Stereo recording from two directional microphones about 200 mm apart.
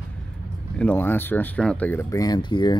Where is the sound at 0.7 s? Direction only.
10° left (ahead or behind).